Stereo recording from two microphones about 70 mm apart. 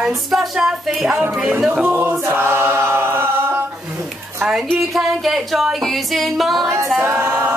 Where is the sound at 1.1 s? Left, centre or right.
Centre.